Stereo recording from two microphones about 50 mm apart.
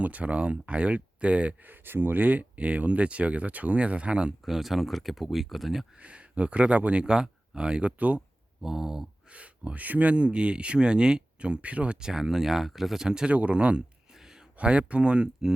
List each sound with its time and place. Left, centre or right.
0.0 s speech: right
1.6 s speech: right
4.4 s speech: centre
6.0 s speech: right
7.0 s speech: centre
8.6 s speech: centre
9.3 s speech: right
13.3 s speech: right
14.2 s a sound: centre
14.6 s speech: right